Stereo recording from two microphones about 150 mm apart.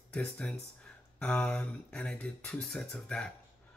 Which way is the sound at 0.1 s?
5° left (ahead or behind).